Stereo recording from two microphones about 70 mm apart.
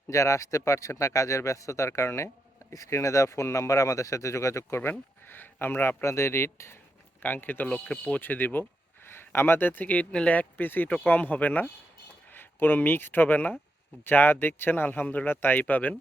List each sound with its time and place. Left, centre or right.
0.1 s speech: left
6.0 s speech: left
7.2 s speech: left